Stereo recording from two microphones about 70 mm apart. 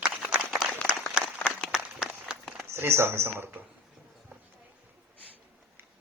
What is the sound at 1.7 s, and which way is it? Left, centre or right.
Run, centre.